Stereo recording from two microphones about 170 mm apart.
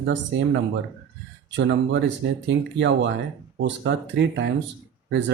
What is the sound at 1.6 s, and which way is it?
Speech, 90° right.